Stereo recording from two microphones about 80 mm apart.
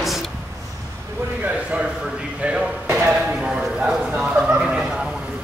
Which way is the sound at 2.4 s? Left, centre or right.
Centre.